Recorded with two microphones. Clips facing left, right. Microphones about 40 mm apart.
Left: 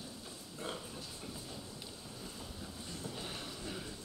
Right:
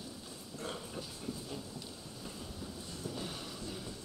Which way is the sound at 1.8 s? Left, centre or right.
Centre.